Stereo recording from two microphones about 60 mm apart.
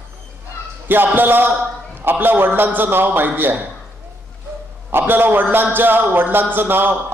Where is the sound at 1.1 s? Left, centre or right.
Right.